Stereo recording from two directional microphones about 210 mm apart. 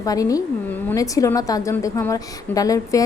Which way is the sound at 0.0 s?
15° left (ahead or behind).